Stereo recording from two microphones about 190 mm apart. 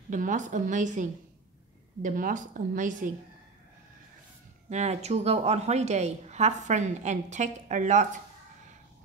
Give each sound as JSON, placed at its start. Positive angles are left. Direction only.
{"t": 0.1, "sound": "a woman's voice", "side_deg": -40}
{"t": 4.6, "sound": "a woman's voice", "side_deg": -35}